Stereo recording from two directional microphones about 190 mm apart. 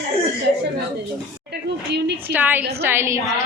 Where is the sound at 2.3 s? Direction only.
10° right (ahead or behind).